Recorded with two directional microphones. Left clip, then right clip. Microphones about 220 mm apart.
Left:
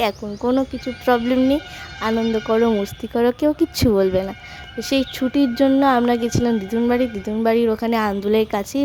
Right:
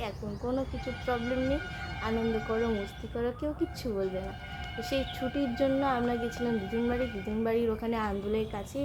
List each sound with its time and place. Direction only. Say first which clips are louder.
0.0 s speech: left 15 dB; 50° left (ahead or behind)